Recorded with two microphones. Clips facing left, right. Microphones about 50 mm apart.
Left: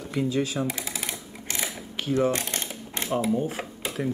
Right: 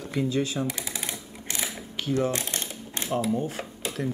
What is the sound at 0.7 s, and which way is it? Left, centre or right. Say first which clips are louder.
Speech: left 1 dB; left.